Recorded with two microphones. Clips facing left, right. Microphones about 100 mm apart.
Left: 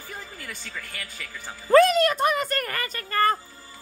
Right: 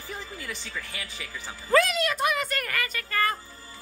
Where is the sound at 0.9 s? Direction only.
10° right (ahead or behind).